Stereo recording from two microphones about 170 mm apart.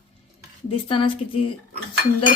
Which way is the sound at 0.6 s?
30° left (ahead or behind).